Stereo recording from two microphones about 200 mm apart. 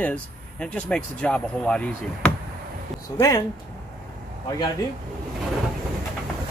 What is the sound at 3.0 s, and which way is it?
Speech, 15° left (ahead or behind).